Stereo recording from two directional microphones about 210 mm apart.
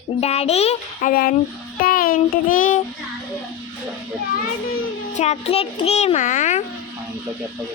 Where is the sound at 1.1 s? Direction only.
45° left (ahead or behind).